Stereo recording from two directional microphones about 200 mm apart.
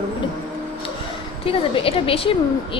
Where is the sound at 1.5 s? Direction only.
25° left (ahead or behind).